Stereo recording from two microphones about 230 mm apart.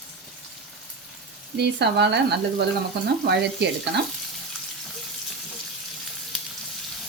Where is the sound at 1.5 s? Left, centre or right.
Right.